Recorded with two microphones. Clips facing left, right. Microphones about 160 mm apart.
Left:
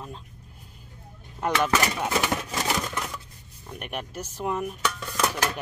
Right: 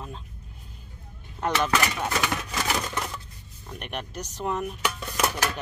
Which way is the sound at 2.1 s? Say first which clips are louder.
Left 2 dB; 25° left (ahead or behind).